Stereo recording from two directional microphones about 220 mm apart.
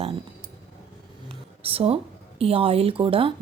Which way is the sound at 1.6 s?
25° right (ahead or behind).